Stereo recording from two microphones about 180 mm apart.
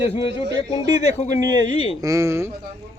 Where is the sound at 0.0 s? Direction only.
30° left (ahead or behind).